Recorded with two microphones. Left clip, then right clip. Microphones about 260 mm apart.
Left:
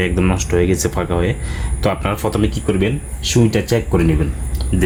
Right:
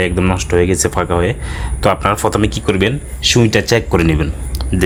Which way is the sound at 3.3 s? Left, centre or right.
Right.